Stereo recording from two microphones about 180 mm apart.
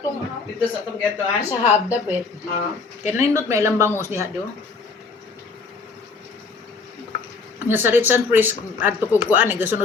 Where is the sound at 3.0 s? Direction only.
15° right (ahead or behind).